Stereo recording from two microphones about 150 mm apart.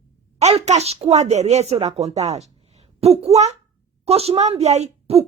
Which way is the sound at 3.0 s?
45° right (ahead or behind).